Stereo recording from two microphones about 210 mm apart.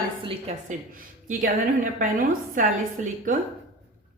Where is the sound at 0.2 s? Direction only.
25° right (ahead or behind).